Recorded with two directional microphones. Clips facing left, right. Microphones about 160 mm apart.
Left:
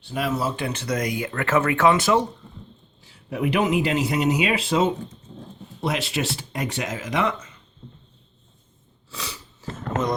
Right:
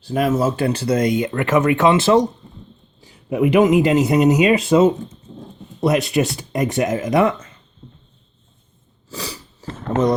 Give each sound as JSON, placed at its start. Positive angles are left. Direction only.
{"t": 0.0, "sound": "speech", "side_deg": -45}
{"t": 3.3, "sound": "a man's voice", "side_deg": -50}
{"t": 6.6, "sound": "a man's voice", "side_deg": -50}
{"t": 9.0, "sound": "sniff", "side_deg": -35}